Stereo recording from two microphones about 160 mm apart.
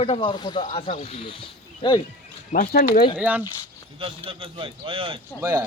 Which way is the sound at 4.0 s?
35° right (ahead or behind).